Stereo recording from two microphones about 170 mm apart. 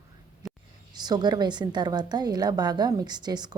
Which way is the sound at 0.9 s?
25° right (ahead or behind).